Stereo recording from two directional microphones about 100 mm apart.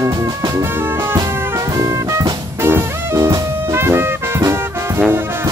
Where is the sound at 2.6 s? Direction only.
25° right (ahead or behind).